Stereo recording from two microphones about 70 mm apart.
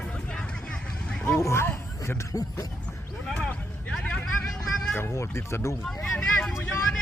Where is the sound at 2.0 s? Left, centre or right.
Left.